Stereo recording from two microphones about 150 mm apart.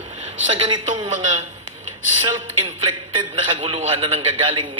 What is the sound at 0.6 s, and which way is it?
Speech, 30° right (ahead or behind).